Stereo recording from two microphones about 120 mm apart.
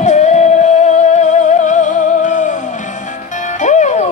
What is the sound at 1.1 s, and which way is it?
Music, 85° left.